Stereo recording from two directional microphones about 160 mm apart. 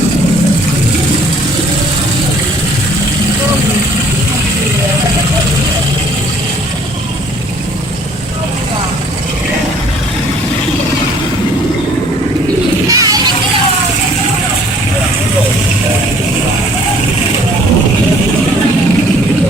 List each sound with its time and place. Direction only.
12.9 s music: 20° right (ahead or behind)